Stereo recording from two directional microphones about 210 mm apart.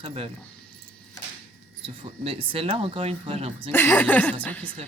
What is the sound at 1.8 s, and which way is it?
Speech, 25° right (ahead or behind).